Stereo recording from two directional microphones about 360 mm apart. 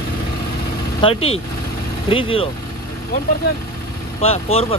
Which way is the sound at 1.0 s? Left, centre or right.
Centre.